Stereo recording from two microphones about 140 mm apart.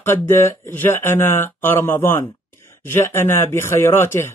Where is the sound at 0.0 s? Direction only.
20° left (ahead or behind).